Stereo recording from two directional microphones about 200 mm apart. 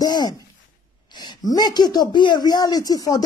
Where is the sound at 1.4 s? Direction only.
20° left (ahead or behind).